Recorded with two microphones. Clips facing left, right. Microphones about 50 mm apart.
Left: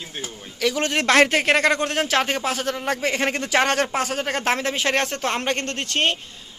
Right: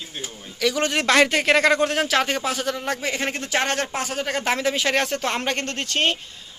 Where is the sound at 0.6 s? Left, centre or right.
Left.